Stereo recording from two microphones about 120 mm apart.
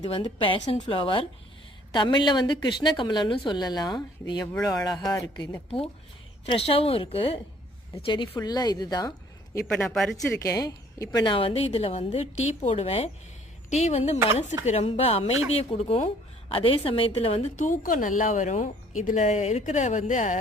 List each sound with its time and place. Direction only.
0.1 s a woman's voice: 45° left (ahead or behind)
6.4 s a woman's voice: 50° left (ahead or behind); by 9.1 s 35° left (ahead or behind)
9.7 s speech: 5° left (ahead or behind)
10.2 s a woman's voice: 25° left (ahead or behind); by 17.5 s 55° left (ahead or behind)
17.6 s speech: 90° left